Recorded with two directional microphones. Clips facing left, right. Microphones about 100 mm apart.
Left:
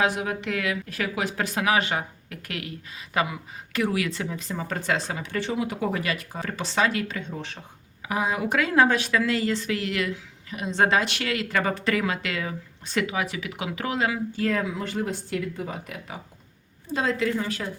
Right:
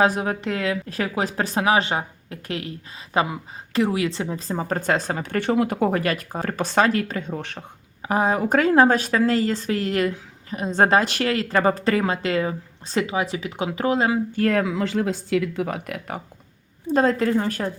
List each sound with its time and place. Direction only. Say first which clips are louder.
0.0 s speech: right 5 dB; 35° right (ahead or behind)
8.0 s speech: right 5 dB; 40° right (ahead or behind)
14.3 s speech: right 5 dB; 60° right (ahead or behind)
16.8 s speech: right 6 dB; 45° right (ahead or behind)